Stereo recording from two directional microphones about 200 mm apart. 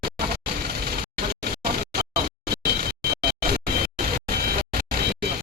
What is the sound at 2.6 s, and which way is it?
Music, 50° right (ahead or behind).